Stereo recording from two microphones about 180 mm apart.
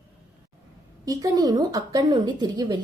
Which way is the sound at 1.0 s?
20° right (ahead or behind).